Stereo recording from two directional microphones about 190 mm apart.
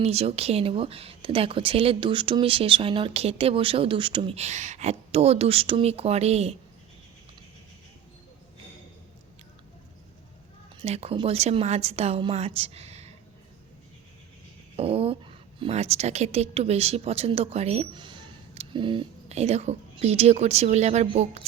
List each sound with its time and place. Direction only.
0.0 s speech: 30° right (ahead or behind)
10.8 s speech: 35° right (ahead or behind)
14.8 s speech: 30° right (ahead or behind)